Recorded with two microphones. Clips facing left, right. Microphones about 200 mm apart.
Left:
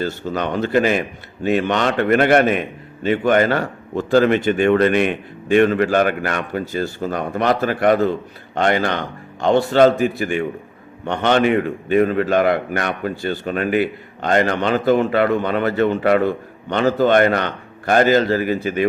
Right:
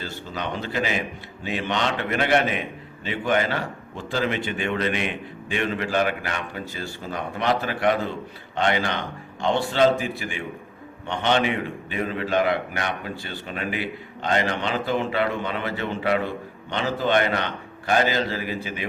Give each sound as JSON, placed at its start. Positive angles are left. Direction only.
{"t": 0.0, "sound": "a man's voice", "side_deg": 50}